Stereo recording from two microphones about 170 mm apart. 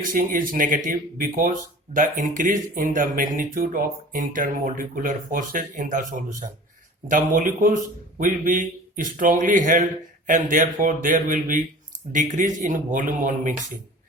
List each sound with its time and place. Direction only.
0.0 s speech: 55° right (ahead or behind)
7.3 s speech: 50° right (ahead or behind)